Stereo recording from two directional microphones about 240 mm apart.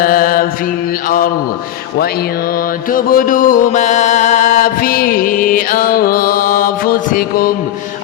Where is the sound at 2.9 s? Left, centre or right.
Left.